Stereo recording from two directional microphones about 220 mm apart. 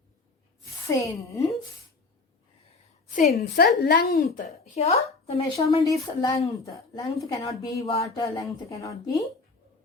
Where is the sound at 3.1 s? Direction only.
40° left (ahead or behind).